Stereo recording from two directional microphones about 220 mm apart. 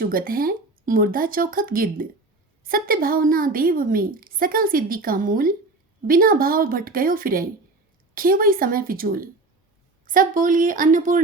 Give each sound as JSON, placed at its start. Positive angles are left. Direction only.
{"t": 0.0, "sound": "a woman's voice", "side_deg": -40}